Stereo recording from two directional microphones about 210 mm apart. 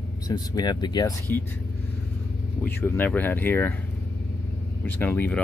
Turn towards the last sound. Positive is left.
turn(degrees=10)  # may be behind; listen again after turning